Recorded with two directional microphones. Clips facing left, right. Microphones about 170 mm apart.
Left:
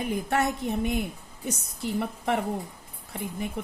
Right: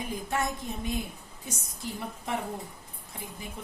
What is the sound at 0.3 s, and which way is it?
A woman's voice, 65° left (ahead or behind).